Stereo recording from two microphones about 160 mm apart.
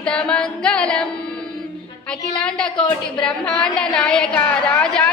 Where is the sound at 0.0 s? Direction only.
5° left (ahead or behind).